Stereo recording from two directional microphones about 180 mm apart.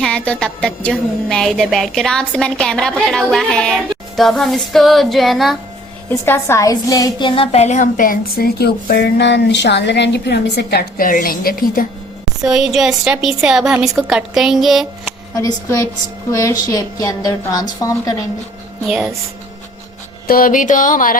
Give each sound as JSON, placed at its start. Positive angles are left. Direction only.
{"t": 0.0, "sound": "music", "side_deg": 5}
{"t": 6.1, "sound": "a woman's voice", "side_deg": 15}
{"t": 12.5, "sound": "music", "side_deg": -5}
{"t": 15.4, "sound": "a woman's voice", "side_deg": 20}
{"t": 18.9, "sound": "music", "side_deg": -5}
{"t": 20.2, "sound": "a woman's voice", "side_deg": 55}